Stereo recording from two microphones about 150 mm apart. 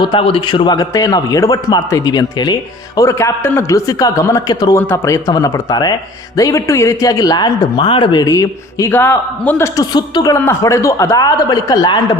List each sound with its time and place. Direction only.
0.0 s a man's voice: 35° left (ahead or behind); by 9.6 s 10° left (ahead or behind)
9.7 s a man's voice: 25° left (ahead or behind)